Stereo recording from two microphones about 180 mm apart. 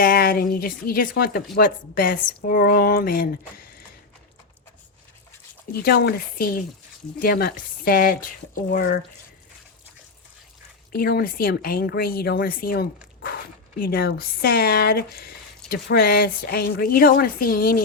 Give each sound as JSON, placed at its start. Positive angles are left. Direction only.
{"t": 0.0, "sound": "a woman's voice", "side_deg": 55}
{"t": 5.7, "sound": "a woman's voice", "side_deg": 60}
{"t": 11.0, "sound": "a woman's voice", "side_deg": 55}